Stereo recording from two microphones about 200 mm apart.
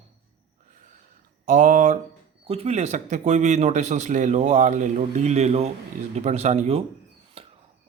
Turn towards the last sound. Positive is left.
turn(degrees=-30)  # may be behind; listen again after turning